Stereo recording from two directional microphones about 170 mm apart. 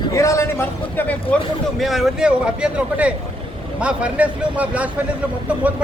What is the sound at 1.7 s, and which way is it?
Speech, centre (ahead or behind).